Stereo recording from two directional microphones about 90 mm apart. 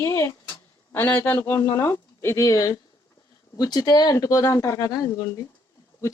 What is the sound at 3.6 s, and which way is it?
Speech, 45° left (ahead or behind).